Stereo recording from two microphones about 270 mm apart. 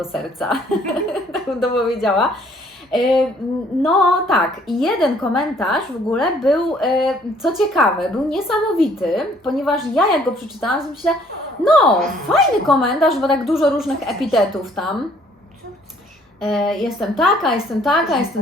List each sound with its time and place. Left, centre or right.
0.0 s a woman's voice: centre
16.4 s a woman's voice: centre